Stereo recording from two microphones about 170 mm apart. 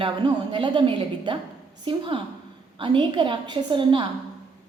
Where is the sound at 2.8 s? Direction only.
30° right (ahead or behind).